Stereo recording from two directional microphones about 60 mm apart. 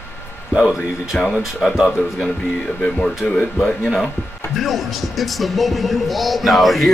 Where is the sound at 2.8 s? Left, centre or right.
Centre.